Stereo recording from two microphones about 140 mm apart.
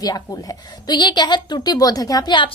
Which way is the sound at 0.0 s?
25° left (ahead or behind).